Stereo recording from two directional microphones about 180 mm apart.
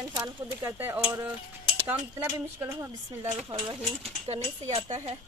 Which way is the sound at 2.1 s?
15° right (ahead or behind).